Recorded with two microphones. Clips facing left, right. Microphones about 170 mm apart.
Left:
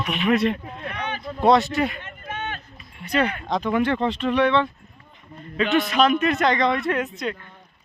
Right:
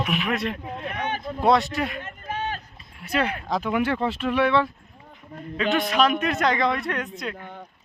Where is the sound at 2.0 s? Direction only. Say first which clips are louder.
Right 2 dB; 35° right (ahead or behind).